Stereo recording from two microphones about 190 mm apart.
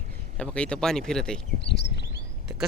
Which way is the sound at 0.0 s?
40° right (ahead or behind).